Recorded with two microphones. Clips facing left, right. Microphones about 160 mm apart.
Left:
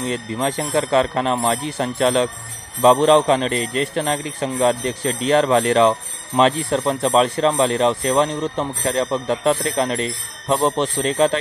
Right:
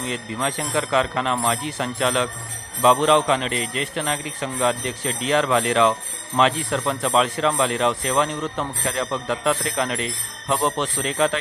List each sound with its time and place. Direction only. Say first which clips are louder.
0.0 s speech: left 4 dB; 35° left (ahead or behind)